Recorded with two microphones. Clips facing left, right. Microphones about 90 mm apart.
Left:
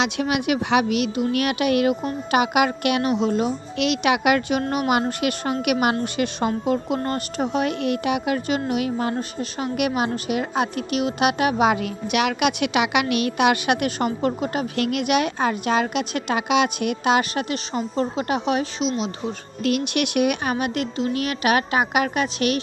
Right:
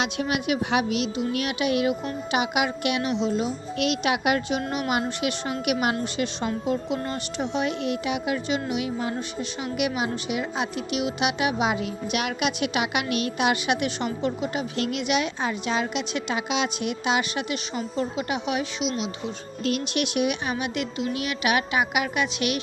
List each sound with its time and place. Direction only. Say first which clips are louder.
0.0 s a woman's voice: left 4 dB; 85° left; by 3.5 s 55° left (ahead or behind)
3.8 s a woman's voice: left 4 dB; 85° left
4.7 s a woman's voice: left 5 dB; 60° left (ahead or behind)
5.6 s a woman's voice: left 3 dB; 65° left (ahead or behind); by 19.0 s 40° left (ahead or behind)
19.6 s a woman's voice: left 4 dB; 65° left (ahead or behind); by 22.6 s 40° left (ahead or behind)